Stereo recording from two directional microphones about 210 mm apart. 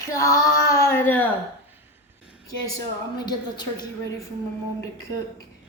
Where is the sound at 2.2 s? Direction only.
5° right (ahead or behind).